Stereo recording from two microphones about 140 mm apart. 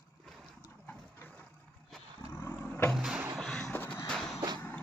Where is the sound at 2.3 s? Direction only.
15° left (ahead or behind).